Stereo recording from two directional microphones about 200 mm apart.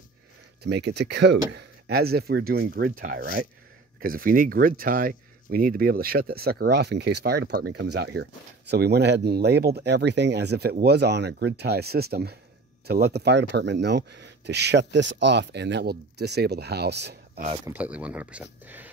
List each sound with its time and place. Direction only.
0.7 s speech: 60° right (ahead or behind)
17.6 s speech: 5° right (ahead or behind)